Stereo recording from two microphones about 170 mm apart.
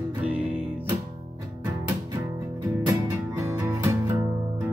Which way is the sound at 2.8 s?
20° right (ahead or behind).